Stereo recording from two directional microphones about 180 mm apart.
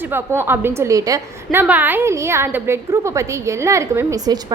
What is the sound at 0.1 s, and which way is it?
A woman's voice, 10° right (ahead or behind).